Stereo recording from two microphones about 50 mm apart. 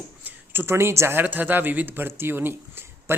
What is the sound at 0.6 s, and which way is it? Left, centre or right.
Speech, right.